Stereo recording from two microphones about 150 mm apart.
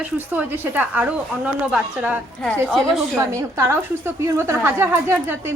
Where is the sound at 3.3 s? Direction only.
20° right (ahead or behind).